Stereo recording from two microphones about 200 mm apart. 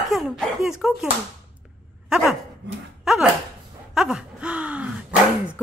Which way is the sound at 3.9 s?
5° right (ahead or behind).